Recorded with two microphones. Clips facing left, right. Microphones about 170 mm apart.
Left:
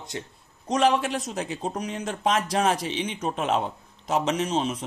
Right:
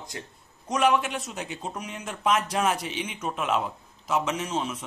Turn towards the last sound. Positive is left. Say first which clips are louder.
# left 4 dB
turn(degrees=35)  # may be behind; listen again after turning